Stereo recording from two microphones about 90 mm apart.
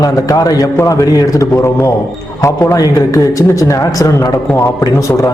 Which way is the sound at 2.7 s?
40° left (ahead or behind).